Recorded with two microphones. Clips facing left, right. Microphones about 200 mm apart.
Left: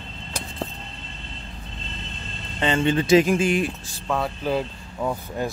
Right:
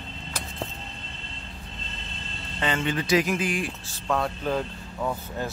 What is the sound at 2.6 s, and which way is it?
Speech, 25° left (ahead or behind).